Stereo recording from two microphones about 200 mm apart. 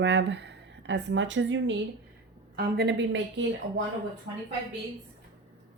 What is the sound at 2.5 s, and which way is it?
Speech, 50° right (ahead or behind).